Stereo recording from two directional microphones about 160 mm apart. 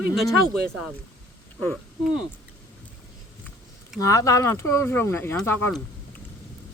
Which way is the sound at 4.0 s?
20° left (ahead or behind).